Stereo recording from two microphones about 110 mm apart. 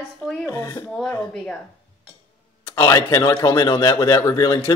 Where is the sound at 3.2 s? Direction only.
45° left (ahead or behind).